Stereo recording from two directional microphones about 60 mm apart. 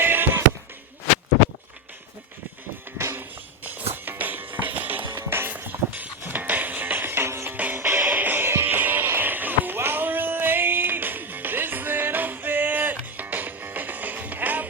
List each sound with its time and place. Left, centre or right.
0.0 s music: right
3.0 s music: right
5.1 s music: right
7.5 s music: right
7.8 s music: right